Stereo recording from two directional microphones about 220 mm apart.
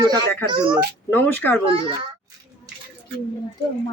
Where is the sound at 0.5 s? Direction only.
20° right (ahead or behind).